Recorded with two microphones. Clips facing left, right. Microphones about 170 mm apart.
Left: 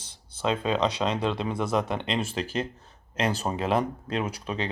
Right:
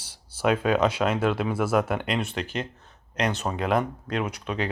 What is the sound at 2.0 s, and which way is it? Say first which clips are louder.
Speech: right 1 dB; 25° left (ahead or behind).